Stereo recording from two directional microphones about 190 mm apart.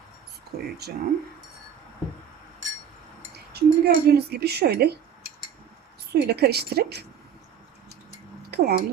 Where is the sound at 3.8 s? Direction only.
55° right (ahead or behind).